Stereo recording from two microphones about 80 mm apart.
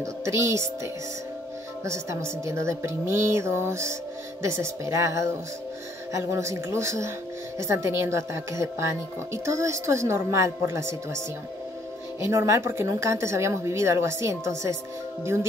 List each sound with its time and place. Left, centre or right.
0.0 s speech: right
1.9 s speech: right
12.2 s speech: right